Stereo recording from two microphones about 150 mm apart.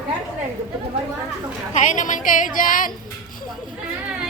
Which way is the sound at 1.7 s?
55° left (ahead or behind).